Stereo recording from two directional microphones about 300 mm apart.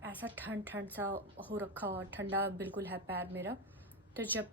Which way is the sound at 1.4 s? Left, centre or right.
Right.